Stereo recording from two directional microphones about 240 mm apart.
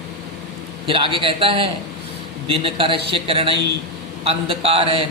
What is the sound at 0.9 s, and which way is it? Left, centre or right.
A man's voice, right.